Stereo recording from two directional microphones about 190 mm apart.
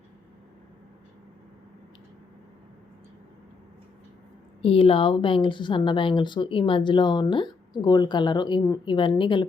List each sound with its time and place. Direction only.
4.6 s speech: 30° left (ahead or behind)